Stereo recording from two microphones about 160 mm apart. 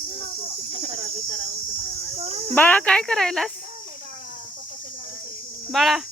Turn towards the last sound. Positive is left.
turn(degrees=0)  # may be behind; listen again after turning